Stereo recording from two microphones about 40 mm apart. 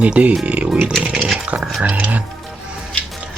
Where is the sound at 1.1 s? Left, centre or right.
Centre.